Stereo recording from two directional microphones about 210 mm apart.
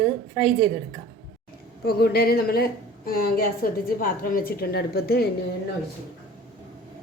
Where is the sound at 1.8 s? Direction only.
45° left (ahead or behind).